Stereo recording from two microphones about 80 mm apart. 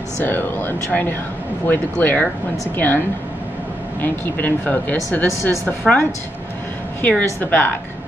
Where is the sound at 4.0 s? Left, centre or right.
Left.